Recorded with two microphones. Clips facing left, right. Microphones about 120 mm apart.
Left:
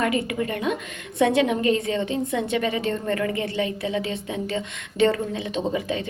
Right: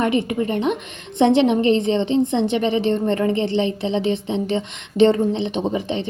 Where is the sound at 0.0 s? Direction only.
25° right (ahead or behind).